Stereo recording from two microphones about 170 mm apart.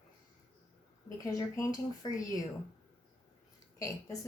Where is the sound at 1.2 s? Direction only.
20° left (ahead or behind).